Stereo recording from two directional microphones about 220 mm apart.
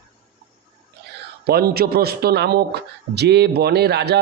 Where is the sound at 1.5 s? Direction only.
45° right (ahead or behind).